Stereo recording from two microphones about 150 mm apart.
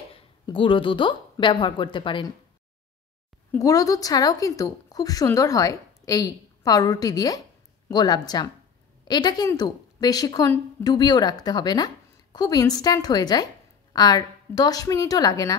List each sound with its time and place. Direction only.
0.1 s speech: 35° left (ahead or behind)
3.5 s a woman's voice: 25° left (ahead or behind)